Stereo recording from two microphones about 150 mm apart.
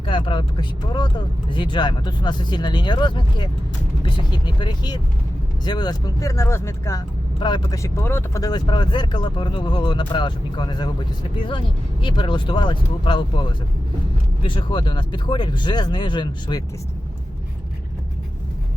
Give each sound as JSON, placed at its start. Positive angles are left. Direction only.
{"t": 0.0, "sound": "speech", "side_deg": 35}
{"t": 7.3, "sound": "speech", "side_deg": 30}